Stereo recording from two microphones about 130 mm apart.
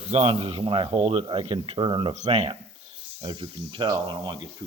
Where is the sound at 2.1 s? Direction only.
60° right (ahead or behind).